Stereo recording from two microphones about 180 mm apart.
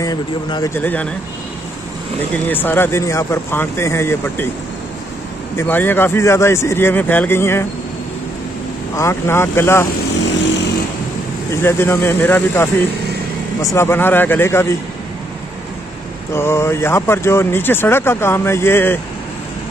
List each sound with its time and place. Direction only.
0.0 s speech: 20° left (ahead or behind)
0.7 s speech: 10° left (ahead or behind)
2.3 s speech: 10° left (ahead or behind)
5.6 s speech: 10° left (ahead or behind)
8.9 s speech: 15° left (ahead or behind)
11.5 s speech: 15° left (ahead or behind)
13.7 s speech: 15° left (ahead or behind)
16.3 s speech: 15° left (ahead or behind)